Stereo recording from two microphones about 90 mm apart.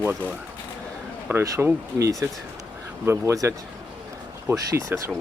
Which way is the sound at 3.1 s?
30° right (ahead or behind).